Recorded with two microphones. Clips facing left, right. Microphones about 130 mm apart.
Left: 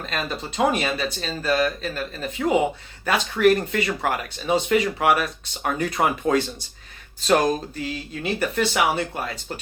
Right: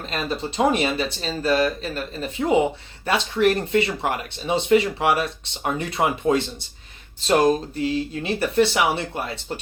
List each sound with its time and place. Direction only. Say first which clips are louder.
0.0 s speech: right 2 dB; 30° right (ahead or behind)